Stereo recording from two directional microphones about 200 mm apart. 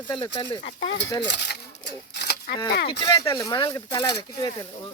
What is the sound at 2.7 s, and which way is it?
Speech, 55° left (ahead or behind).